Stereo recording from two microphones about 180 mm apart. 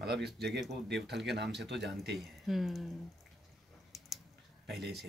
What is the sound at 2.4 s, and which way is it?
Speech, centre (ahead or behind).